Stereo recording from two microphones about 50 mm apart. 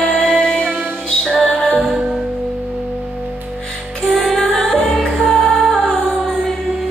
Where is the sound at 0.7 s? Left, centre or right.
Right.